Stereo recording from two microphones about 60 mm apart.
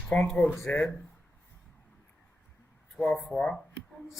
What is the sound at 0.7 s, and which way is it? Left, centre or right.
Speech, left.